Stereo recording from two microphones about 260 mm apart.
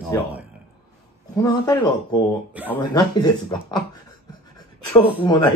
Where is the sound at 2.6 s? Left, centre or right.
Centre.